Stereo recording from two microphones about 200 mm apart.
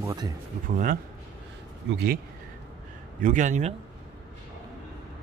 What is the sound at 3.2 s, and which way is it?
Speech, 40° right (ahead or behind).